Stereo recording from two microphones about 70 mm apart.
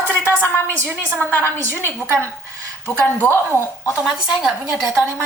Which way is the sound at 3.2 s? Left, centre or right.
Left.